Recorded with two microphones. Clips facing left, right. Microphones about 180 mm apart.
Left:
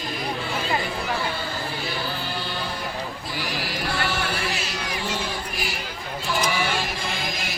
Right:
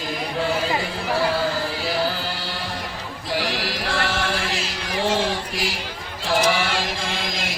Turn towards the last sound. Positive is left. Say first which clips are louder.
# right 2 dB
turn(degrees=-90)